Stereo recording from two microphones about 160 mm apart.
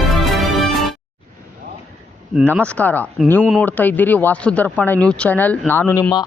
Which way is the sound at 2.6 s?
10° left (ahead or behind).